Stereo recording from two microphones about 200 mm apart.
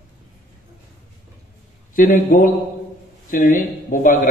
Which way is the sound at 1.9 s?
40° left (ahead or behind).